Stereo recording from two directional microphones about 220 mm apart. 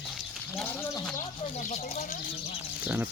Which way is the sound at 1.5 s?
30° left (ahead or behind).